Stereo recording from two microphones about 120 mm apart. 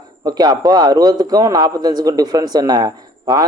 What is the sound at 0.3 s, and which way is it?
Speech, 35° right (ahead or behind).